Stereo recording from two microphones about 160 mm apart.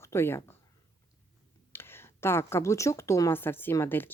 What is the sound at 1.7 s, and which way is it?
Speech, 15° left (ahead or behind).